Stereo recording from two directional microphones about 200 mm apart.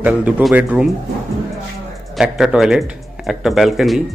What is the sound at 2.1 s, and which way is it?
Speech, 5° right (ahead or behind).